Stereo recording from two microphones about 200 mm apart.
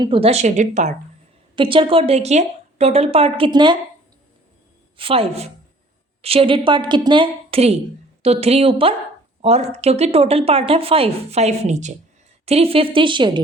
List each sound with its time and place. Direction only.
0.0 s speech: 25° right (ahead or behind)
1.5 s a woman's voice: 25° right (ahead or behind)
4.9 s a woman's voice: 30° right (ahead or behind)